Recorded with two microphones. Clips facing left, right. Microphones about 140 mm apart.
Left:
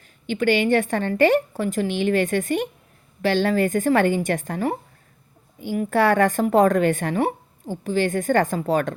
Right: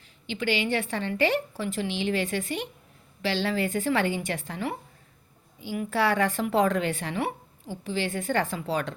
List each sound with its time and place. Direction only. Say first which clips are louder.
0.3 s a woman's voice: left 8 dB; 50° left (ahead or behind)